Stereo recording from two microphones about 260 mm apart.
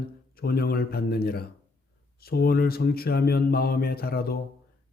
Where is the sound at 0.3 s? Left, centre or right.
Left.